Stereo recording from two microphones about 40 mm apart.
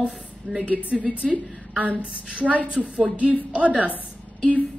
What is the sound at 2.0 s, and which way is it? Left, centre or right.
Speech, right.